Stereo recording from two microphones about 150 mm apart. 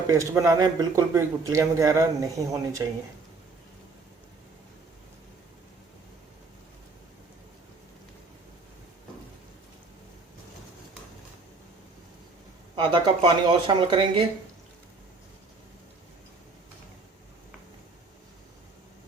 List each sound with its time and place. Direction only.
0.1 s speech: 20° right (ahead or behind)
12.7 s speech: 30° right (ahead or behind)